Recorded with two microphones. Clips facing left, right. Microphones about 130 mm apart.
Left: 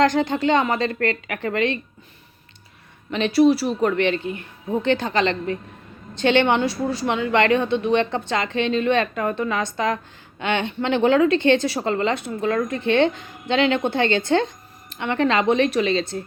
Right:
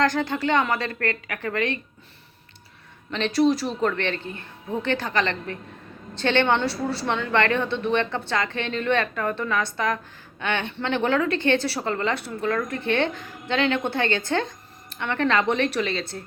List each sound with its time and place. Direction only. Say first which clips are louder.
0.0 s a woman's voice: left 4 dB; 20° left (ahead or behind)
3.1 s a woman's voice: left 4 dB; 15° left (ahead or behind)